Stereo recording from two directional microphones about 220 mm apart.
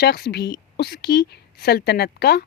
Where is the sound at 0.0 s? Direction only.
50° left (ahead or behind).